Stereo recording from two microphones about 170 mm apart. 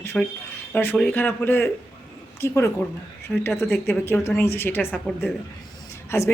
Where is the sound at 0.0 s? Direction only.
15° left (ahead or behind).